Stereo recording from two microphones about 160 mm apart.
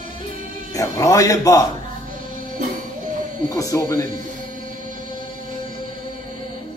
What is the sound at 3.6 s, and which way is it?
Speech, 20° left (ahead or behind).